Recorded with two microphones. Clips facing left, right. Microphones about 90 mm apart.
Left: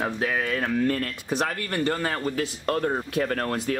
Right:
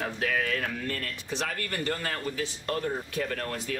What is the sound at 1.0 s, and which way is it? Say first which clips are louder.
Speech: left 7 dB; 45° left (ahead or behind).